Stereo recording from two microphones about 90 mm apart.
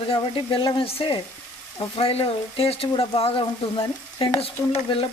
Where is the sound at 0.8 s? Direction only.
80° left.